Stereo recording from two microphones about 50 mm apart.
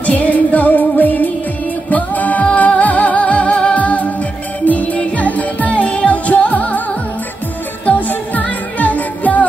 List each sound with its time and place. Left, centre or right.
0.0 s music of asia: left
1.9 s music: left
7.8 s music: left